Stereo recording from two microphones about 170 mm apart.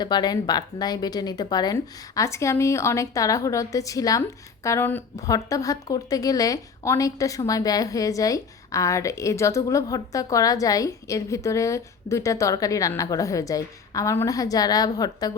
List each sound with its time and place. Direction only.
0.0 s a woman's voice: 25° left (ahead or behind)